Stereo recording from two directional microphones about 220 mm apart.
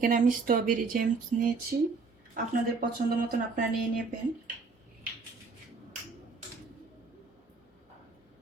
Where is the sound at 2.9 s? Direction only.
40° right (ahead or behind).